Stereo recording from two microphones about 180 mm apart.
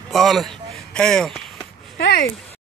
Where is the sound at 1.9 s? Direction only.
55° left (ahead or behind).